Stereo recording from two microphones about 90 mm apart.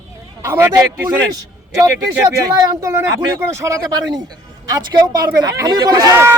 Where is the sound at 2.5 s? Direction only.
35° right (ahead or behind).